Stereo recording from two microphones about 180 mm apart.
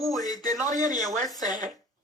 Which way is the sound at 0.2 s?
20° left (ahead or behind).